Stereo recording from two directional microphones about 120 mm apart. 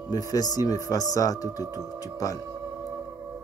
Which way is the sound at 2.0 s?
30° left (ahead or behind).